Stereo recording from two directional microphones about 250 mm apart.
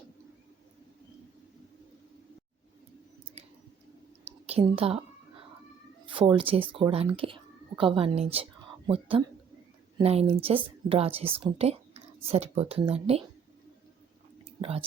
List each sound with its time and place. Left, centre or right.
4.3 s a woman's voice: right
6.1 s a woman's voice: right
14.6 s speech: right